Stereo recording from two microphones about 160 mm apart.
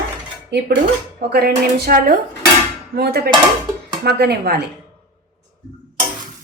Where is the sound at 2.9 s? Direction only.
85° right.